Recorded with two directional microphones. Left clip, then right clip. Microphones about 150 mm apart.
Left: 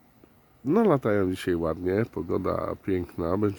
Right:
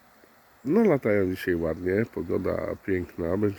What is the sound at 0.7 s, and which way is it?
Speech, 35° left (ahead or behind).